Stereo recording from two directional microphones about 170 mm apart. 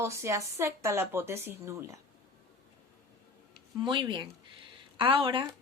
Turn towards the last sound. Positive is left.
turn(degrees=-30)  # may be behind; listen again after turning